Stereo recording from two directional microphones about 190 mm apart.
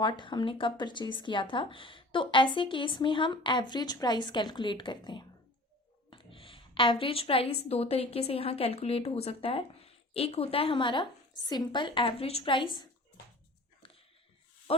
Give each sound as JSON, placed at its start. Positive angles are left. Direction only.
{"t": 0.0, "sound": "a woman's voice", "side_deg": 25}
{"t": 13.8, "sound": "a sound", "side_deg": 25}
{"t": 14.7, "sound": "speech", "side_deg": 30}